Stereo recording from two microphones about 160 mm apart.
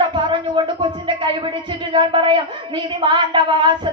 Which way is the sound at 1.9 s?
30° right (ahead or behind).